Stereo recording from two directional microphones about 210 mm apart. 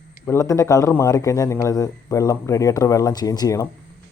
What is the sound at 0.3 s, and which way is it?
Speech, 15° left (ahead or behind).